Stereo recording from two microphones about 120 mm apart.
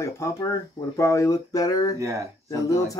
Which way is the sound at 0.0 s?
30° left (ahead or behind).